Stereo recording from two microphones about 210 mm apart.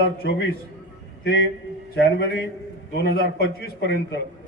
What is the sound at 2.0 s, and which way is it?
A man's voice, 50° left (ahead or behind).